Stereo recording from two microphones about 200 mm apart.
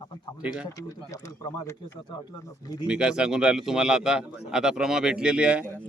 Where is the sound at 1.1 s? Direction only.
15° left (ahead or behind).